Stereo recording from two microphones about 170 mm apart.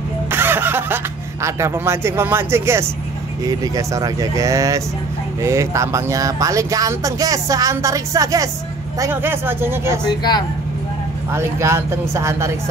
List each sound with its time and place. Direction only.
0.3 s music: 15° right (ahead or behind)
3.4 s speech: 20° right (ahead or behind)
10.0 s speech: 25° left (ahead or behind)
11.3 s speech: 15° right (ahead or behind)